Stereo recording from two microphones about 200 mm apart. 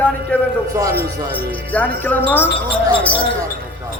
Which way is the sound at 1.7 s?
10° left (ahead or behind).